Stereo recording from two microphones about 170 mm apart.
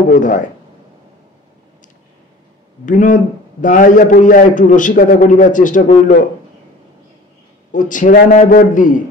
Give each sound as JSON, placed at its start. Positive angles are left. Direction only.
{"t": 0.1, "sound": "a man's voice", "side_deg": 50}
{"t": 2.8, "sound": "a man's voice", "side_deg": 50}
{"t": 7.7, "sound": "a man's voice", "side_deg": 50}